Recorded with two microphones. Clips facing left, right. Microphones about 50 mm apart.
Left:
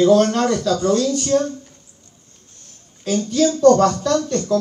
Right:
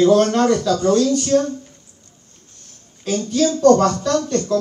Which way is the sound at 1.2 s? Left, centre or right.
Left.